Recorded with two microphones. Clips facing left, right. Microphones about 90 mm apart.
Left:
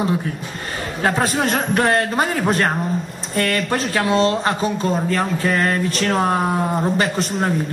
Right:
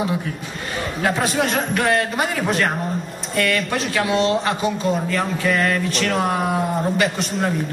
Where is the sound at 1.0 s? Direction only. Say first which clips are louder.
Left 2 dB; 40° left (ahead or behind).